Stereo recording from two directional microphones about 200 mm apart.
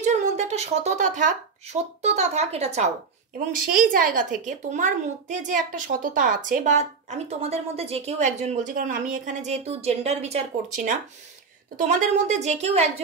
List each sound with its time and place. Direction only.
0.0 s a child's voice: 35° right (ahead or behind)
3.5 s a child's voice: 45° right (ahead or behind)